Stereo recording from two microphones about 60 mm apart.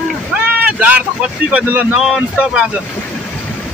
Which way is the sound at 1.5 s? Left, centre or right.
Right.